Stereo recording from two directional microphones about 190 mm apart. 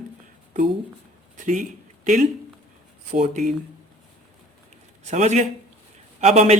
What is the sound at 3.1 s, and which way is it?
Speech, 40° right (ahead or behind).